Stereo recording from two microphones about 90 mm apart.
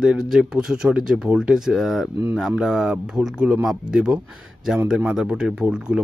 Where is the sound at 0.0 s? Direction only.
5° right (ahead or behind).